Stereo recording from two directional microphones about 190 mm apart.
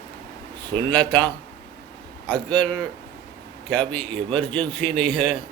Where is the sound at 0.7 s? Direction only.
25° right (ahead or behind).